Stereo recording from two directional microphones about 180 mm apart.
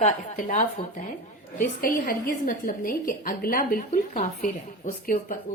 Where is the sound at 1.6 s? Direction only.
55° left (ahead or behind).